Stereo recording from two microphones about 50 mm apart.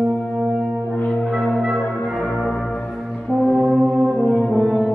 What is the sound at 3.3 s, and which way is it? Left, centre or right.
Brass instrument, centre.